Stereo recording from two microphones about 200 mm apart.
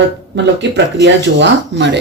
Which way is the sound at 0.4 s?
60° right (ahead or behind).